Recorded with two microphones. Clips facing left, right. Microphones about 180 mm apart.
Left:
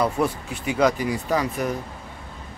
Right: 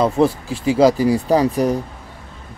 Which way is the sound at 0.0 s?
30° right (ahead or behind).